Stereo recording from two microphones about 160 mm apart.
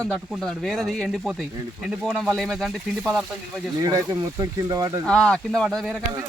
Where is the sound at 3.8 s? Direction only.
20° right (ahead or behind).